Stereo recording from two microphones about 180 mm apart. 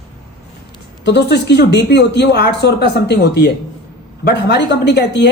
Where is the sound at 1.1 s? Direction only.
70° left (ahead or behind).